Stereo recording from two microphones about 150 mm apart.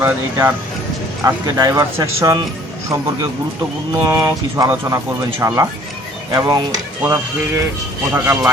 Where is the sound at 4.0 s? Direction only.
20° right (ahead or behind).